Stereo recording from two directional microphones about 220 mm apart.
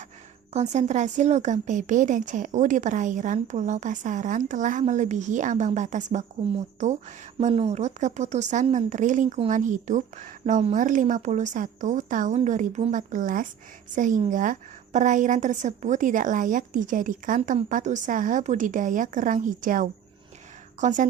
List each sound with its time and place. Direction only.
0.5 s speech: 30° right (ahead or behind)